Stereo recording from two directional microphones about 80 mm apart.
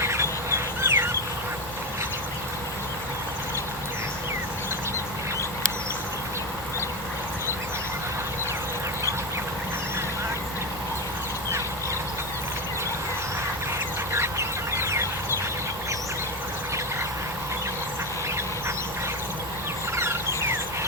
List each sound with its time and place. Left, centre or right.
0.0 s duck: right
14.1 s duck: right
20.0 s a sound: right